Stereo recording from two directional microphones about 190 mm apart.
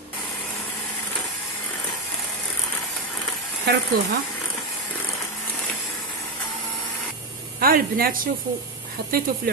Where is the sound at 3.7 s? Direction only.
60° right (ahead or behind).